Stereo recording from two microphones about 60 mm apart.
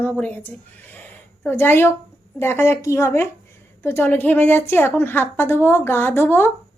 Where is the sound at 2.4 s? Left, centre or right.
Left.